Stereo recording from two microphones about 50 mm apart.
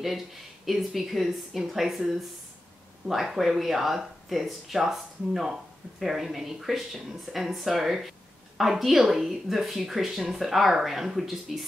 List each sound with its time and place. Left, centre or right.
0.7 s speech: centre